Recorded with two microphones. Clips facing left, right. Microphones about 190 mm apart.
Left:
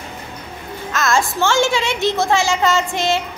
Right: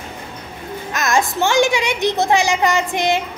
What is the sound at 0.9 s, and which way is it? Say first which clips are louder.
A child's voice: even; 15° right (ahead or behind).